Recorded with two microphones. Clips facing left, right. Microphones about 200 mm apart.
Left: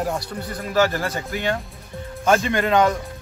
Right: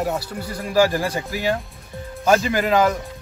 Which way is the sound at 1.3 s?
Centre (ahead or behind).